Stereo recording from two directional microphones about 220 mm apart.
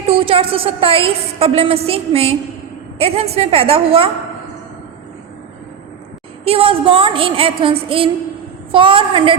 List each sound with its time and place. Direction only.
0.1 s a woman's voice: 25° right (ahead or behind)
6.4 s a woman's voice: 25° right (ahead or behind)